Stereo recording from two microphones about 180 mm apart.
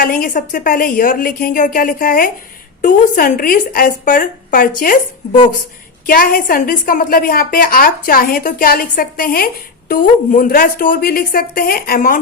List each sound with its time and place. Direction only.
0.0 s a woman's voice: 50° left (ahead or behind)